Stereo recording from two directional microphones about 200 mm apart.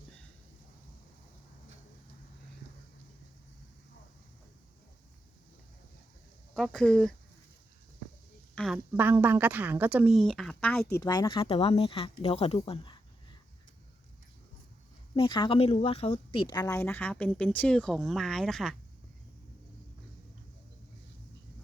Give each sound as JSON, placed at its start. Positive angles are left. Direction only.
{"t": 6.5, "sound": "speech", "side_deg": 5}
{"t": 8.5, "sound": "a sound", "side_deg": 0}
{"t": 9.0, "sound": "a woman's voice", "side_deg": -10}
{"t": 10.9, "sound": "speech", "side_deg": 20}
{"t": 15.1, "sound": "speech", "side_deg": 25}